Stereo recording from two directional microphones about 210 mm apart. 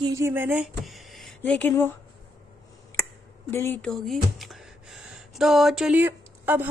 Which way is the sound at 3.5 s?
10° left (ahead or behind).